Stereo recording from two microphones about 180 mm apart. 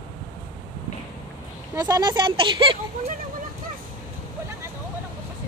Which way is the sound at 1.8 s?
20° right (ahead or behind).